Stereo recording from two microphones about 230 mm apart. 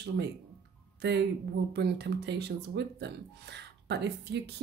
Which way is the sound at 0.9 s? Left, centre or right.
Right.